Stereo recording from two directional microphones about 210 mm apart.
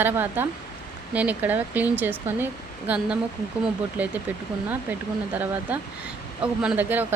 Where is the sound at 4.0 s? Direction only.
5° right (ahead or behind).